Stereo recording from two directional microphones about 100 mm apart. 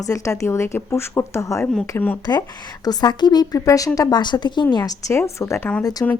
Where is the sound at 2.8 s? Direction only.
45° left (ahead or behind).